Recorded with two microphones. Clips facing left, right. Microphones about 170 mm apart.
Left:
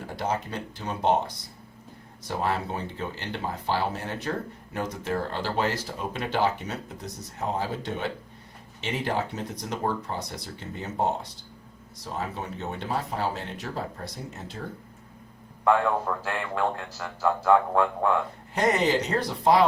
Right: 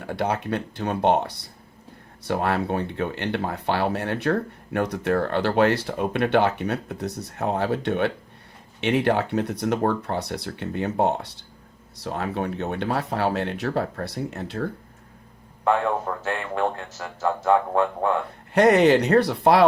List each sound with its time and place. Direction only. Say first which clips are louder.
0.1 s speech: right 5 dB; 65° right (ahead or behind)
16.2 s speech: right 3 dB; 25° right (ahead or behind)
18.5 s speech: right 8 dB; 65° right (ahead or behind)